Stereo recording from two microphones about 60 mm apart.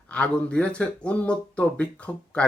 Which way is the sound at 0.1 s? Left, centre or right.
Centre.